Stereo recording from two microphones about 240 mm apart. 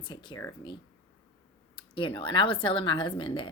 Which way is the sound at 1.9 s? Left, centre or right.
Left.